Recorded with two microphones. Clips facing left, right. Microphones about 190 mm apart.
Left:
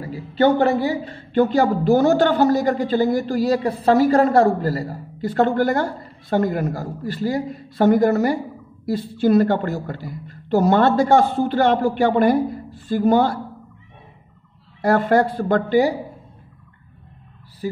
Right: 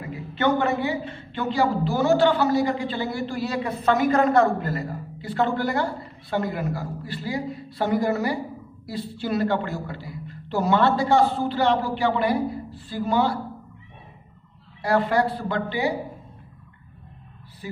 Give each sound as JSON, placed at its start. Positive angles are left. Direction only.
{"t": 0.0, "sound": "a woman's voice", "side_deg": 35}
{"t": 14.8, "sound": "a woman's voice", "side_deg": 45}